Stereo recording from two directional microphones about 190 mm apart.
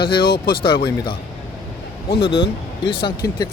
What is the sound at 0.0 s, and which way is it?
Speech, 55° left (ahead or behind).